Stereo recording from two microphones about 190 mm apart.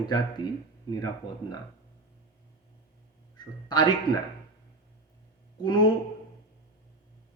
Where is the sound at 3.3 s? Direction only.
25° left (ahead or behind).